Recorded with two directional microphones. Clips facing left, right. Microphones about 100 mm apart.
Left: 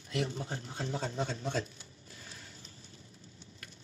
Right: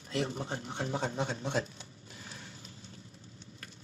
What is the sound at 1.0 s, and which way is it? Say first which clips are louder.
Speech: right 2 dB; 55° right (ahead or behind).